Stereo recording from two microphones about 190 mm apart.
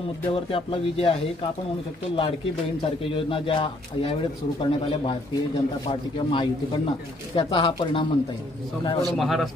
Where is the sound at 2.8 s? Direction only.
30° left (ahead or behind).